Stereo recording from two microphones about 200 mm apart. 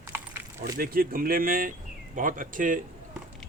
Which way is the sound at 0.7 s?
45° right (ahead or behind).